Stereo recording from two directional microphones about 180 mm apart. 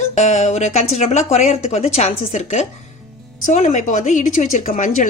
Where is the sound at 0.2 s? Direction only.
40° left (ahead or behind).